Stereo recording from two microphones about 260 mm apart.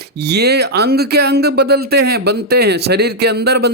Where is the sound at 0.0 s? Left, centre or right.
Right.